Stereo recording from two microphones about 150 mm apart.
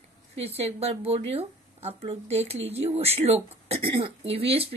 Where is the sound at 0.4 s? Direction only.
45° right (ahead or behind).